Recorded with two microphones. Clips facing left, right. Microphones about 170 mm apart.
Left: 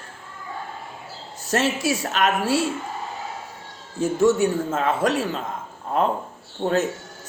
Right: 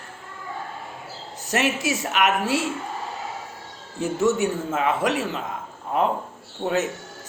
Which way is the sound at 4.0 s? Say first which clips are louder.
Left 3 dB; 20° right (ahead or behind).